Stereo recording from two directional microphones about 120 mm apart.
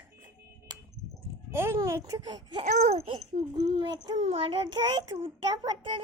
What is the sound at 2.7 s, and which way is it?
Speech, 75° right (ahead or behind).